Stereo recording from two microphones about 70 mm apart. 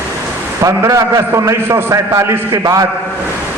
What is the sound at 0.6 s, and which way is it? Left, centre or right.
A man's voice, right.